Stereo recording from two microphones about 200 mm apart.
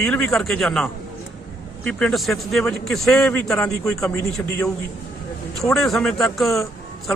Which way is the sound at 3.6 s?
15° left (ahead or behind).